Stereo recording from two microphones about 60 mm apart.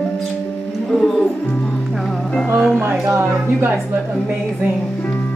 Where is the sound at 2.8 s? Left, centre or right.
Right.